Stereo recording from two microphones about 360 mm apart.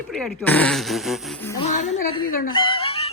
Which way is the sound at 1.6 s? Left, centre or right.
Centre.